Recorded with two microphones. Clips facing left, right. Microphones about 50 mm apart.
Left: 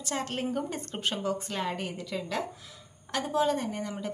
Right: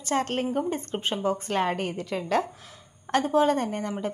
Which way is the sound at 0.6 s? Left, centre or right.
Right.